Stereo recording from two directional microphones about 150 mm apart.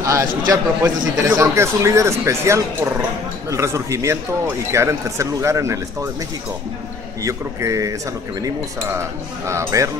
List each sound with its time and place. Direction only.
0.0 s a man's voice: 20° right (ahead or behind)
7.2 s speech: 20° right (ahead or behind)